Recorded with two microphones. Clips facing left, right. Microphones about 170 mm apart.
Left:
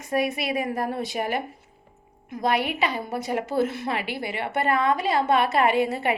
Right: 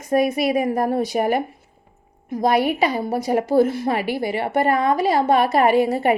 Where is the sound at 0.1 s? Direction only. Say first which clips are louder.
Right 7 dB; 40° right (ahead or behind).